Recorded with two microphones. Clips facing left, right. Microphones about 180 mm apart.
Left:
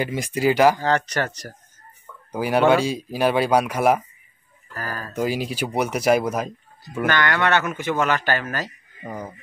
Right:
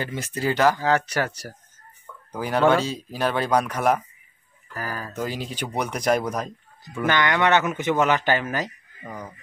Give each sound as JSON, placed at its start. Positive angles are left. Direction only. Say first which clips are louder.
{"t": 0.0, "sound": "speech", "louder": "left 5 dB", "side_deg": 10}
{"t": 0.8, "sound": "a man's voice", "louder": "even", "side_deg": -5}
{"t": 2.3, "sound": "speech", "louder": "left 2 dB", "side_deg": 10}
{"t": 4.7, "sound": "a man's voice", "louder": "even", "side_deg": -15}
{"t": 5.1, "sound": "speech", "louder": "left 9 dB", "side_deg": 10}
{"t": 7.1, "sound": "a man's voice", "louder": "right 1 dB", "side_deg": -15}
{"t": 9.0, "sound": "speech", "louder": "left 4 dB", "side_deg": 25}